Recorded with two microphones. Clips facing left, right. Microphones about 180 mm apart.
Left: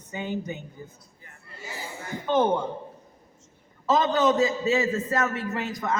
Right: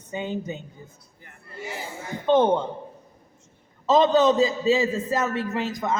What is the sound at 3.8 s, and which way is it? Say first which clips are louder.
A man's voice: right 4 dB; 20° right (ahead or behind).